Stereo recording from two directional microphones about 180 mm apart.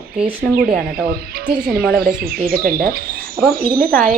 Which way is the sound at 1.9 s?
55° right (ahead or behind).